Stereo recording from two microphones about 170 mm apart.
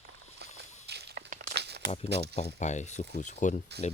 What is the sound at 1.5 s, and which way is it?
Crumpling, 80° right.